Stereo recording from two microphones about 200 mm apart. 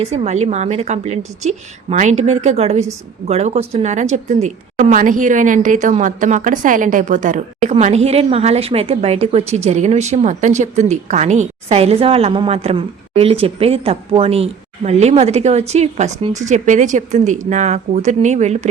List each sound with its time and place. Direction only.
0.0 s speech: 30° right (ahead or behind)